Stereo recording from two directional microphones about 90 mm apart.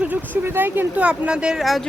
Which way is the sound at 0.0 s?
20° right (ahead or behind).